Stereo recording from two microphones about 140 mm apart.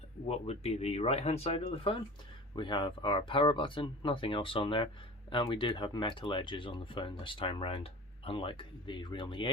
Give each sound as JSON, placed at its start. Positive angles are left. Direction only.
{"t": 0.3, "sound": "speech", "side_deg": 45}